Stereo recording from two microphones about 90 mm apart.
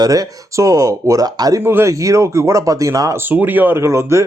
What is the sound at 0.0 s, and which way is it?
Speech, 45° right (ahead or behind).